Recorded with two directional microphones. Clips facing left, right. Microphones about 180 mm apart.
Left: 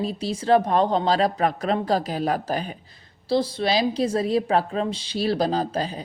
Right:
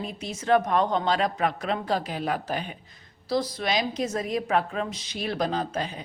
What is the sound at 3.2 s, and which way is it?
A woman's voice, 30° left (ahead or behind).